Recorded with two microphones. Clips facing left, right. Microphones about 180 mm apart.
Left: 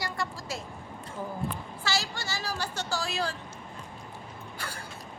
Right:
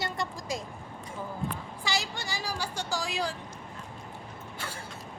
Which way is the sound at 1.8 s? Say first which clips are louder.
Left 1 dB; 20° right (ahead or behind).